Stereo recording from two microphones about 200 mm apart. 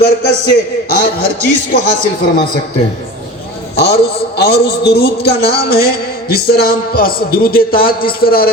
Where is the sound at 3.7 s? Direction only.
55° left (ahead or behind).